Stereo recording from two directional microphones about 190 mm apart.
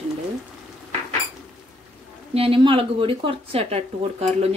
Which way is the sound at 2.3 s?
30° right (ahead or behind).